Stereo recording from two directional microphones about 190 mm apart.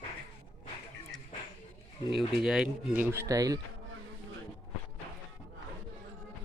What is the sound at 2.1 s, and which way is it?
Speech, centre (ahead or behind).